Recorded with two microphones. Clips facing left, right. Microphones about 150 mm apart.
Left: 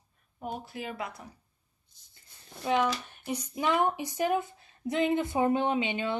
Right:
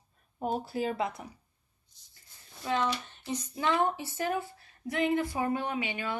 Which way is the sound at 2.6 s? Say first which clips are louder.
Left 3 dB; 15° left (ahead or behind).